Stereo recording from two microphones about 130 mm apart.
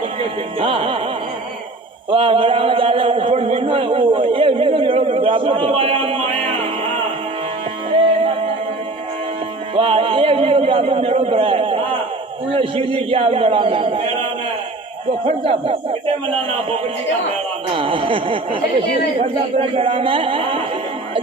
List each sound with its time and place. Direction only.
0.6 s speech: 45° right (ahead or behind)
2.0 s a man's voice: 45° right (ahead or behind)
9.7 s a sound: 45° right (ahead or behind)
12.5 s speech: 45° right (ahead or behind)
15.2 s speech: 45° right (ahead or behind)